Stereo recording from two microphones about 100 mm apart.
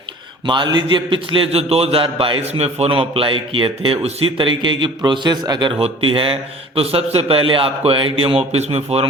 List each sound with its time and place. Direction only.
0.4 s a man's voice: 50° right (ahead or behind)
5.8 s a man's voice: 65° right (ahead or behind); by 9.0 s 90° right